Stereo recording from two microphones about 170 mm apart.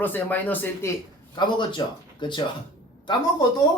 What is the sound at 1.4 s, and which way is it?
Speech, 25° left (ahead or behind).